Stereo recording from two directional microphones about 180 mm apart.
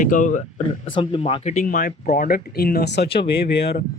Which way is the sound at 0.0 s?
45° left (ahead or behind).